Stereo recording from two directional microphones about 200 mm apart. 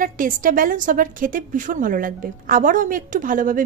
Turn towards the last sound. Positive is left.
turn(degrees=-40)  # may be behind; listen again after turning